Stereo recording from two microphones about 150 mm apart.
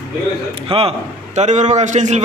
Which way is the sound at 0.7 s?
40° right (ahead or behind).